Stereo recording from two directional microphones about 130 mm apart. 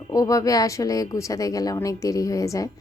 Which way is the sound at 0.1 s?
25° left (ahead or behind).